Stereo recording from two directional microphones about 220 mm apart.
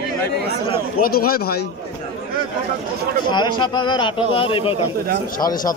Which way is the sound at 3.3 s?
20° left (ahead or behind).